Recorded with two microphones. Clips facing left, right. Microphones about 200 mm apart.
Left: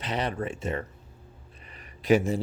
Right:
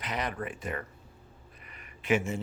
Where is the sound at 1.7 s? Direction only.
35° left (ahead or behind).